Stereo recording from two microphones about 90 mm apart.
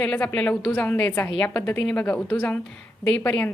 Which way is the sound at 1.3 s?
10° left (ahead or behind).